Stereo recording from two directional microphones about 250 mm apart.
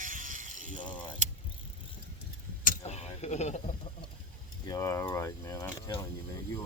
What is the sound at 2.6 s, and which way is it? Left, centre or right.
Vehicle, left.